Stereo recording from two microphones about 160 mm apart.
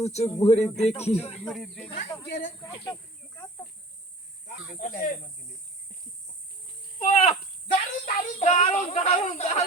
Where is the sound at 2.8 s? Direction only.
20° left (ahead or behind).